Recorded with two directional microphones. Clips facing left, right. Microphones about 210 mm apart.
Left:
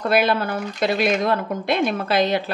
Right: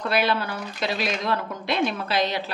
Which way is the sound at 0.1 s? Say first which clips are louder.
Left 5 dB; 50° left (ahead or behind).